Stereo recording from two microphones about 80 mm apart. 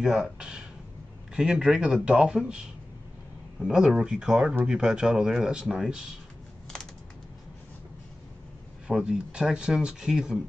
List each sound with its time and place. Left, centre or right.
0.0 s a sound: centre
1.3 s speech: centre
3.6 s speech: centre
8.8 s speech: centre